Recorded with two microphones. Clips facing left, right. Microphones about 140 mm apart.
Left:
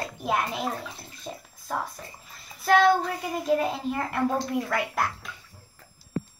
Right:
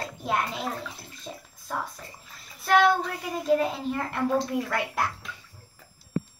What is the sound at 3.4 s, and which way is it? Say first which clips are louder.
Speech: right 1 dB; 5° left (ahead or behind).